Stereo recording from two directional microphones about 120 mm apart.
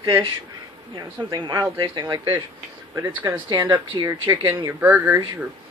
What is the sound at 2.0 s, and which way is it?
Speech, 25° right (ahead or behind).